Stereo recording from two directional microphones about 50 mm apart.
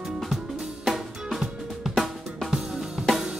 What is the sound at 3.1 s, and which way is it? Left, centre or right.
Drum kit, centre.